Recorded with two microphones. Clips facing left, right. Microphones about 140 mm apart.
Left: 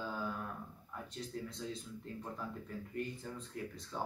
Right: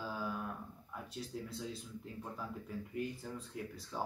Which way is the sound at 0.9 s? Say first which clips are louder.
Even; 5° right (ahead or behind).